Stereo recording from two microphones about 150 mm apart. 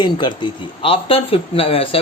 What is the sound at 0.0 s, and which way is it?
A man's voice, 30° left (ahead or behind).